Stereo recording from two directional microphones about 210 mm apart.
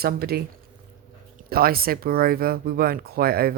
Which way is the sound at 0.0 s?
45° right (ahead or behind).